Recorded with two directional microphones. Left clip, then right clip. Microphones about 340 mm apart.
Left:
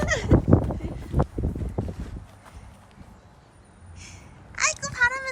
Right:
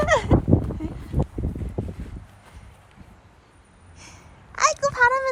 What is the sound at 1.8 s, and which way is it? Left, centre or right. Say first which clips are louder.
Clip-clop: even; centre.